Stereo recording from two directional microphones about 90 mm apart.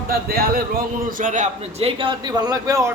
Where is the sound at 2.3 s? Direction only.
45° right (ahead or behind).